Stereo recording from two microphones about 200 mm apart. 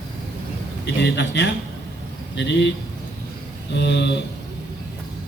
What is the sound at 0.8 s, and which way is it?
A man's voice, 60° left (ahead or behind).